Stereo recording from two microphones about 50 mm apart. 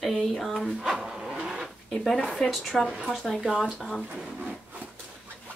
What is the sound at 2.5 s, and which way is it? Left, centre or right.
Speech, centre.